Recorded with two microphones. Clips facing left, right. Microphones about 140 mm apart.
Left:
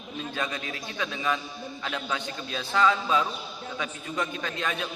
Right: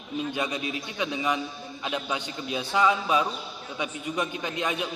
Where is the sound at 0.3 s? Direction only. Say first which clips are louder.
Right 3 dB; 15° right (ahead or behind).